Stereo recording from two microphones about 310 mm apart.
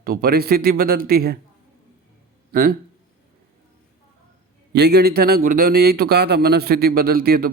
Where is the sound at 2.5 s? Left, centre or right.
Right.